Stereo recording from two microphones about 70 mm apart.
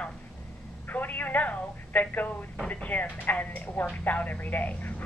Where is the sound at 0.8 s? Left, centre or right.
Left.